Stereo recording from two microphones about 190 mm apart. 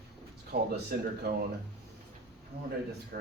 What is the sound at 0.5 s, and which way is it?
Speech, 60° right (ahead or behind).